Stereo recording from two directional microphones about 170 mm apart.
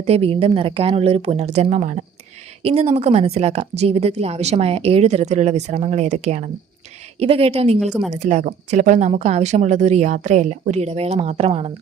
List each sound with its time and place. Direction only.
0.0 s a woman's voice: 35° right (ahead or behind)